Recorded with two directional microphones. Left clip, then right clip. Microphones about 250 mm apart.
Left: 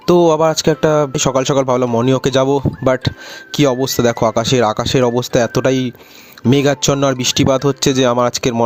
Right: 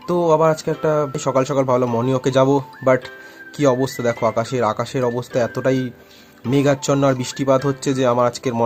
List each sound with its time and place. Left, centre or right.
0.0 s speech: left